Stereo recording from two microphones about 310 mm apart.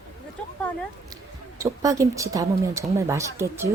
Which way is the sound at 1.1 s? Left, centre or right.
Centre.